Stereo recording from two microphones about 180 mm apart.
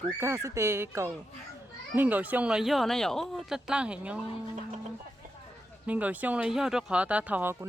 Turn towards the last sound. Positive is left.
turn(degrees=-10)  # may be behind; listen again after turning